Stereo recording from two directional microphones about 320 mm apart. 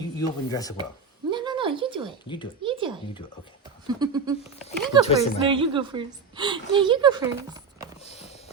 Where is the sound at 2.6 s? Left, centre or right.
Centre.